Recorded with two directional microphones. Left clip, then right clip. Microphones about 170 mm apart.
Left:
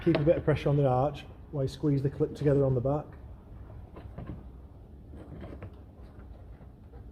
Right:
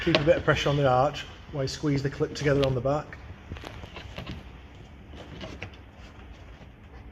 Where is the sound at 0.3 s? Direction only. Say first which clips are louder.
Right 5 dB; 50° left (ahead or behind).